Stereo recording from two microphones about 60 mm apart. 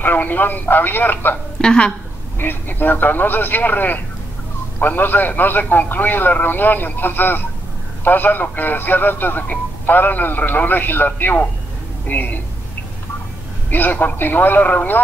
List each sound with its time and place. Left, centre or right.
0.0 s a man's voice: left
1.6 s speech: centre
2.3 s a man's voice: left
13.7 s a man's voice: left